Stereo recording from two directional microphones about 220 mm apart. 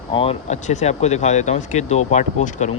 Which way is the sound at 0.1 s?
25° left (ahead or behind).